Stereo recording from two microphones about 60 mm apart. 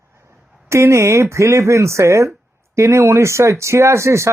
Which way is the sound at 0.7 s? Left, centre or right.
Right.